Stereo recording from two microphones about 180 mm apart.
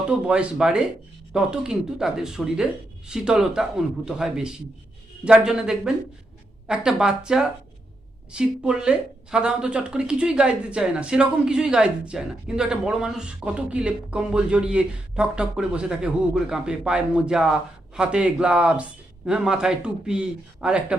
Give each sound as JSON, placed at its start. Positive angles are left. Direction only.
{"t": 0.1, "sound": "speech", "side_deg": -5}